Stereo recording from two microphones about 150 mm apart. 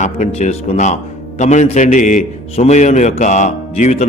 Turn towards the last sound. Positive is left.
turn(degrees=50)  # may be behind; listen again after turning